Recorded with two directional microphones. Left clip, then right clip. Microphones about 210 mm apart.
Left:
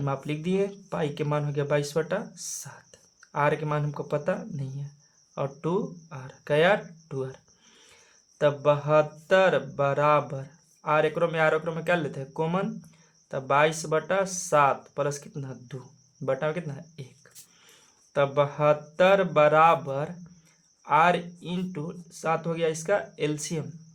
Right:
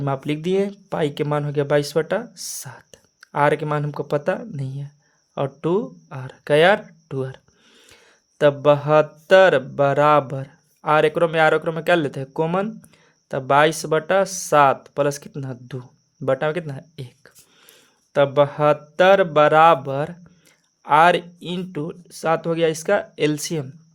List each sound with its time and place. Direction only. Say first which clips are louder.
0.0 s speech: right 7 dB; 40° right (ahead or behind)